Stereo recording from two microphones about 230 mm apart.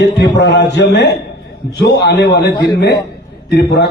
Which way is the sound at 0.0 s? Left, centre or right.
Left.